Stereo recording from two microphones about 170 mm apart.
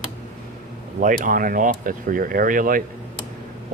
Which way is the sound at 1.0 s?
50° right (ahead or behind).